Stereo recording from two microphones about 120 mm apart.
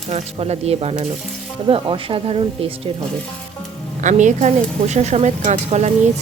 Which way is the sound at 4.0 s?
90° right.